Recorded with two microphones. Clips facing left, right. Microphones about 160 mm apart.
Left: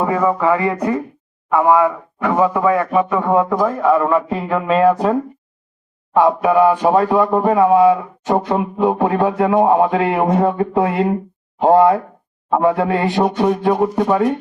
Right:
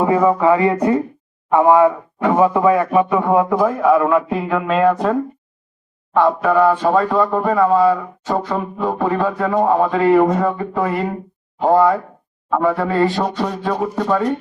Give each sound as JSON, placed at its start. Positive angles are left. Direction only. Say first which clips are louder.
{"t": 0.0, "sound": "speech", "louder": "right 2 dB", "side_deg": -15}
{"t": 6.1, "sound": "speech", "louder": "left 1 dB", "side_deg": 10}
{"t": 11.6, "sound": "a man's voice", "louder": "left 2 dB", "side_deg": 25}